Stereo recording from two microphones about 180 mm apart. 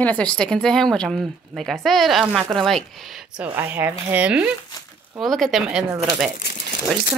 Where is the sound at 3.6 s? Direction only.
10° right (ahead or behind).